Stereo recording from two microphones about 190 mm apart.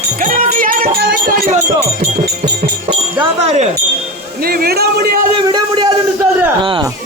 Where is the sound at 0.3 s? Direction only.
45° right (ahead or behind).